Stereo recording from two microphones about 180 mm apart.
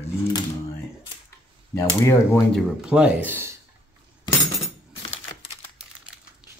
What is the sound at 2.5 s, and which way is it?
Speech, centre (ahead or behind).